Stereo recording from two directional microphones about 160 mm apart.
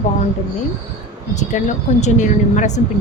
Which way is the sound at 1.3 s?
50° left (ahead or behind).